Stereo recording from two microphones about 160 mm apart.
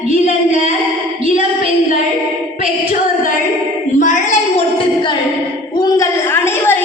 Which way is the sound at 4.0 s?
50° left (ahead or behind).